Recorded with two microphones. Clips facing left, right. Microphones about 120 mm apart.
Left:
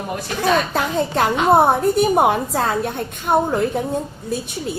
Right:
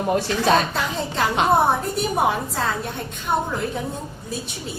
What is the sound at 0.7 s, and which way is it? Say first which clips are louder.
Female singing: left 6 dB; 55° left (ahead or behind).